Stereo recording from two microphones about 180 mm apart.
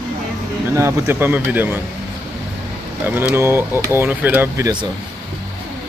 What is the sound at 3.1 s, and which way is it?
Speech, 10° right (ahead or behind).